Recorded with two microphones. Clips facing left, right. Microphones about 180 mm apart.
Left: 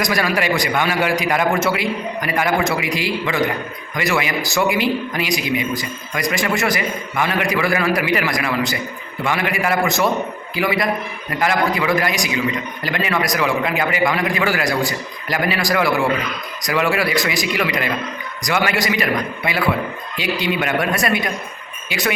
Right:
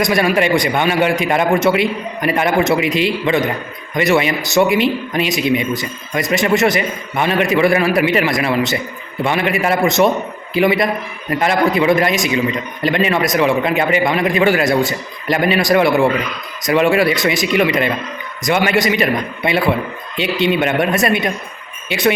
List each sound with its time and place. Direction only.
0.0 s a man's voice: 25° right (ahead or behind)